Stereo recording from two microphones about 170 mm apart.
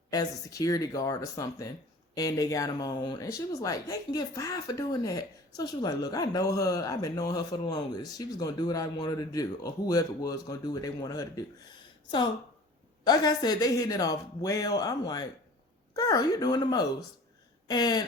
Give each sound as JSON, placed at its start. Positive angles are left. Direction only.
{"t": 0.1, "sound": "speech", "side_deg": 20}
{"t": 13.1, "sound": "speech", "side_deg": 25}